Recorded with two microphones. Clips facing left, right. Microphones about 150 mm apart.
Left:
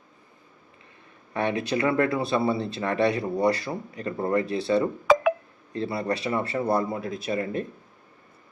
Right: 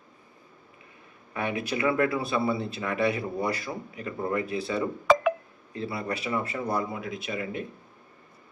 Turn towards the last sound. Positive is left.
turn(degrees=40)  # may be behind; listen again after turning